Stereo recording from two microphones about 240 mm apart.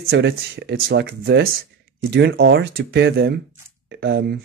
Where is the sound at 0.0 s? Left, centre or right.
Right.